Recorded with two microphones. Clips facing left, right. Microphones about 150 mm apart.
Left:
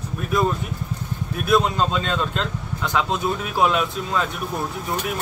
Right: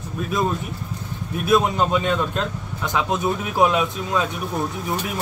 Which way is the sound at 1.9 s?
15° right (ahead or behind).